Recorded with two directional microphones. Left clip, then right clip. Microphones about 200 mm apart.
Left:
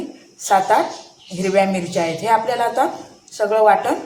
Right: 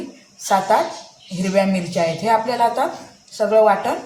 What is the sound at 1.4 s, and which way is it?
A woman's voice, 20° left (ahead or behind).